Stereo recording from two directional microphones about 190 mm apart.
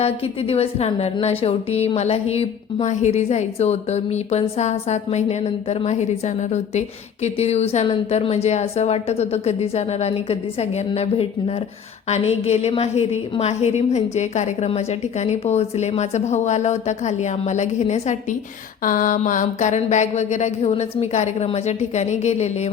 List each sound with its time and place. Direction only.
0.0 s speech: 30° left (ahead or behind)